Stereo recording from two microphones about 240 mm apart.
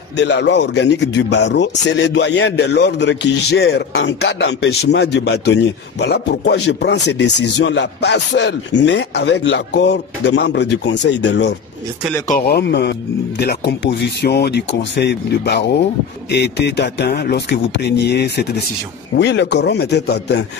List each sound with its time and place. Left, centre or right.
0.2 s a man's voice: left